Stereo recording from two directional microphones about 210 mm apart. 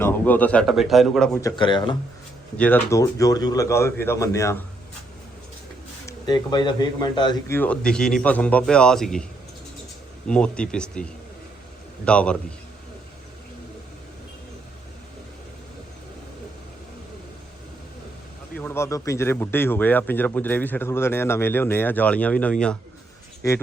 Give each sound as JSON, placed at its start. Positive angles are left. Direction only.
{"t": 0.0, "sound": "a man's voice", "side_deg": 10}
{"t": 1.4, "sound": "speech", "side_deg": 20}
{"t": 2.6, "sound": "a man's voice", "side_deg": 10}
{"t": 6.1, "sound": "speech", "side_deg": 20}
{"t": 7.5, "sound": "a man's voice", "side_deg": 5}
{"t": 10.2, "sound": "a man's voice", "side_deg": 5}
{"t": 18.5, "sound": "a man's voice", "side_deg": 10}